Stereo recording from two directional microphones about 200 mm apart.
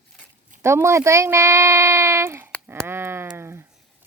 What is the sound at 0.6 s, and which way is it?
Speech, 15° right (ahead or behind).